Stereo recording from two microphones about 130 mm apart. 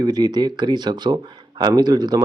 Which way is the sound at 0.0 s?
30° right (ahead or behind).